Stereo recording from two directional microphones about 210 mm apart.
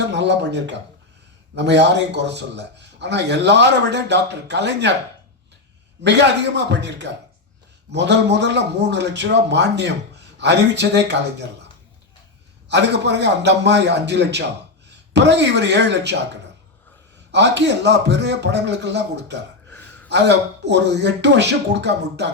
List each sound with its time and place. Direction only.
0.1 s speech: 55° right (ahead or behind)
6.0 s speech: 55° right (ahead or behind)
12.6 s speech: 55° right (ahead or behind)
19.6 s gasp: 10° left (ahead or behind)
20.1 s speech: 55° right (ahead or behind)